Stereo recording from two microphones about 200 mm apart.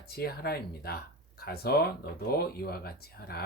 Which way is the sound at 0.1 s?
50° left (ahead or behind).